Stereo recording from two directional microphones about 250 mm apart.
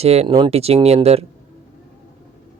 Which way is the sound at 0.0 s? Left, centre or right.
Right.